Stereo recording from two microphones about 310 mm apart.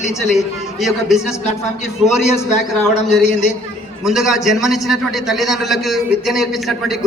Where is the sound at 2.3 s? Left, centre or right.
Left.